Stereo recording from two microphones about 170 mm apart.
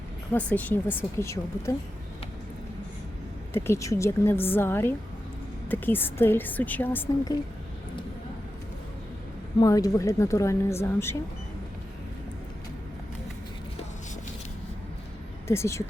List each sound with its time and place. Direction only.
0.3 s speech: 10° left (ahead or behind)
3.5 s speech: 15° left (ahead or behind)
9.6 s speech: 20° left (ahead or behind)
15.4 s speech: 15° left (ahead or behind)